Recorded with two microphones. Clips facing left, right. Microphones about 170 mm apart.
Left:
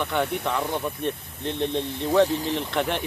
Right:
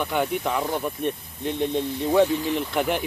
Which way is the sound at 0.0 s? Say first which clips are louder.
Right 1 dB; 5° right (ahead or behind).